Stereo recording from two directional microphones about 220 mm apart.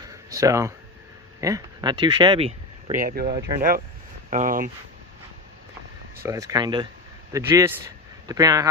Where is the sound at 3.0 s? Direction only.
40° right (ahead or behind).